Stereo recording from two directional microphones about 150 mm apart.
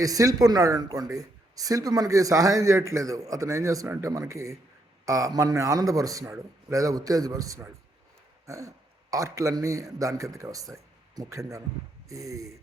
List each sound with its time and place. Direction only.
0.0 s a man's voice: 25° right (ahead or behind)